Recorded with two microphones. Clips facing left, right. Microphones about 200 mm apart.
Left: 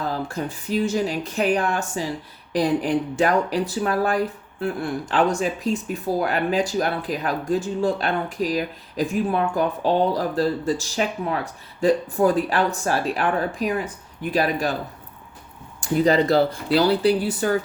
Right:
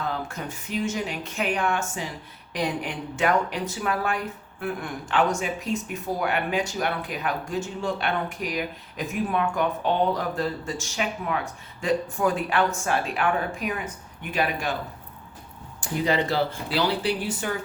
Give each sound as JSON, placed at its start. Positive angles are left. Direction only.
{"t": 0.0, "sound": "speech", "side_deg": 35}
{"t": 15.8, "sound": "speech", "side_deg": 40}